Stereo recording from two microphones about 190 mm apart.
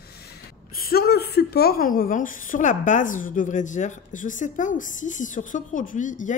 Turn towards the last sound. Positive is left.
turn(degrees=40)  # may be behind; listen again after turning